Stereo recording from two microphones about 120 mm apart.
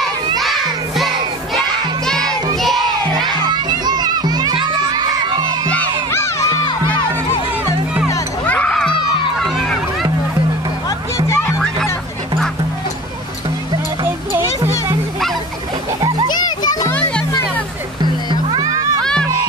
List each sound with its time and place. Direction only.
0.4 s music: centre (ahead or behind)
2.0 s crowd: 5° left (ahead or behind)
2.5 s music: centre (ahead or behind)
3.2 s music: 35° right (ahead or behind)
5.7 s music: 15° left (ahead or behind)
8.5 s a sound: 10° left (ahead or behind)
11.2 s music: 25° left (ahead or behind)
14.0 s music: 20° right (ahead or behind)
16.3 s music: 35° left (ahead or behind)
18.6 s music: 30° right (ahead or behind)